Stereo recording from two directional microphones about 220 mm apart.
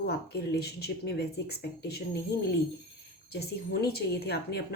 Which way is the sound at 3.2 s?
45° left (ahead or behind).